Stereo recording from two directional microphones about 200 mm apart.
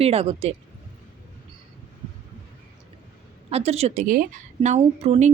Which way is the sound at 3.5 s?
30° right (ahead or behind).